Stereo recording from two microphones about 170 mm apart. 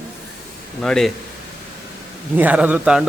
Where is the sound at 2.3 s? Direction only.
10° right (ahead or behind).